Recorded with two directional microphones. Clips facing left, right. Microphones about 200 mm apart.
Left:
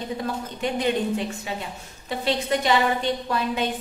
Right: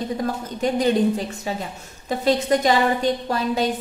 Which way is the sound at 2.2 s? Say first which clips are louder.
Right 5 dB; 45° right (ahead or behind).